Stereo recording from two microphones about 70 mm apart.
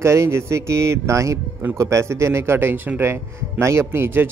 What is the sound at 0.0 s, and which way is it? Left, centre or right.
Speech, right.